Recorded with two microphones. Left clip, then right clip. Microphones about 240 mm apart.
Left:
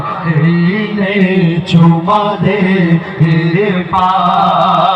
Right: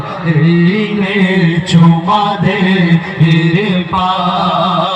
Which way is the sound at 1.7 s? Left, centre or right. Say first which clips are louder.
Left 1 dB; right.